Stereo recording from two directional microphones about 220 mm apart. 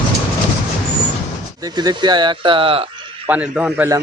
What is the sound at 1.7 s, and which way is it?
Speech, 20° right (ahead or behind).